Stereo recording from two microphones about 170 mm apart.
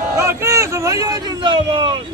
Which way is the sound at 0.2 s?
15° right (ahead or behind).